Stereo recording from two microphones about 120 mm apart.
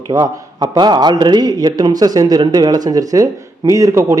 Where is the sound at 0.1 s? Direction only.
30° right (ahead or behind).